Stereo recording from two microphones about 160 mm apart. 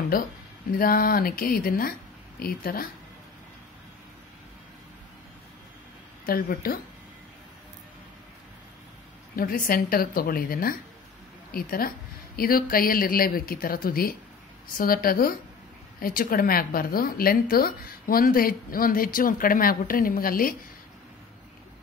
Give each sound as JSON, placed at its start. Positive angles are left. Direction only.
{"t": 0.1, "sound": "speech", "side_deg": 60}
{"t": 6.2, "sound": "speech", "side_deg": 65}
{"t": 9.3, "sound": "a woman's voice", "side_deg": 65}